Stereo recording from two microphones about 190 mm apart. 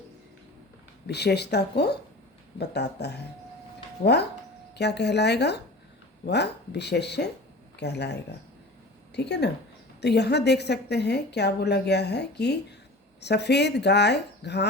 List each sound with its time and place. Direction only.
1.0 s a woman's voice: 60° left (ahead or behind)